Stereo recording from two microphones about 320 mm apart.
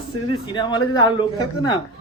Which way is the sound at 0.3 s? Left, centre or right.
Centre.